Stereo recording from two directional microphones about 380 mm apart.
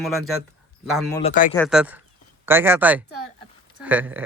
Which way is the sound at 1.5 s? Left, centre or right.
Centre.